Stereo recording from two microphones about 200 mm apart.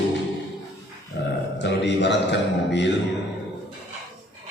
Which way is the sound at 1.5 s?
60° left (ahead or behind).